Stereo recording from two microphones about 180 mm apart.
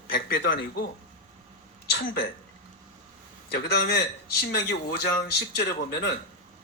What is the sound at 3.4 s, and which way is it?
Speech, 65° left (ahead or behind).